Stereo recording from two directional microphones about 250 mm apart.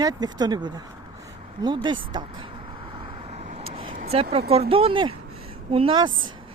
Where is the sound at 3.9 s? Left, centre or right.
Right.